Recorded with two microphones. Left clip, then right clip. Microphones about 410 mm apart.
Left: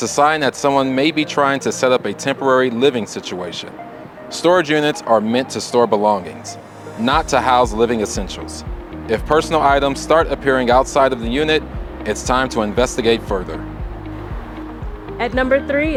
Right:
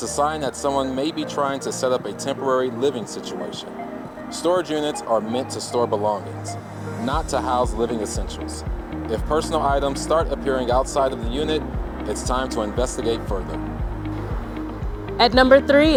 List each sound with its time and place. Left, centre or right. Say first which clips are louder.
0.0 s speech: left 8 dB; left
4.4 s speech: left 7 dB; left
15.2 s speech: right 3 dB; centre